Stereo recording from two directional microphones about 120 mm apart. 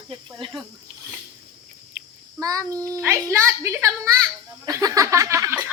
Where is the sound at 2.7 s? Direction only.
10° left (ahead or behind).